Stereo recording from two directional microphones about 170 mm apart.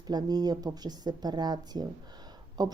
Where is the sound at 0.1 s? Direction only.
25° right (ahead or behind).